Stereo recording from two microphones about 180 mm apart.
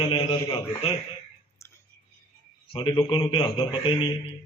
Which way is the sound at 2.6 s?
25° left (ahead or behind).